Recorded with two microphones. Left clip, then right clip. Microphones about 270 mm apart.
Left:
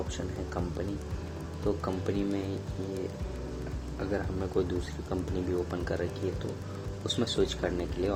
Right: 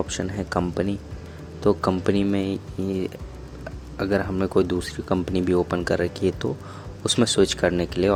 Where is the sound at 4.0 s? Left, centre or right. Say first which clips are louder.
Right 10 dB; right.